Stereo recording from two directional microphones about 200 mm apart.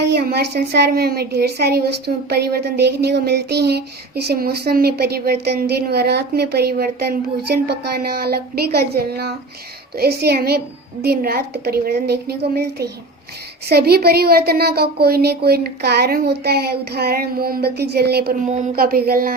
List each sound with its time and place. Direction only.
0.0 s a woman's voice: 55° right (ahead or behind)
18.4 s a woman's voice: 35° right (ahead or behind)